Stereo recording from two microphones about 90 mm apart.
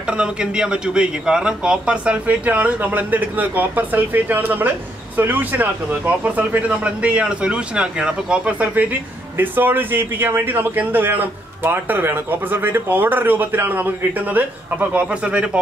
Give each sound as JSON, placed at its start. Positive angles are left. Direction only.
{"t": 0.0, "sound": "a man's voice", "side_deg": -10}